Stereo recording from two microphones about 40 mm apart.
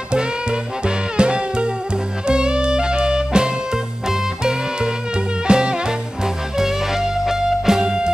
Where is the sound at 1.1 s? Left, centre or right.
Right.